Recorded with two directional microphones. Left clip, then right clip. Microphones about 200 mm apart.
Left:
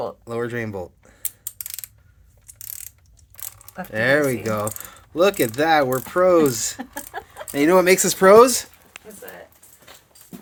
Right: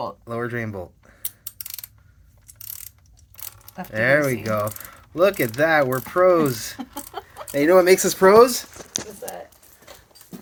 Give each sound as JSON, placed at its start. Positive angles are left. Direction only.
{"t": 0.0, "sound": "speech", "side_deg": 20}
{"t": 3.9, "sound": "speech", "side_deg": 25}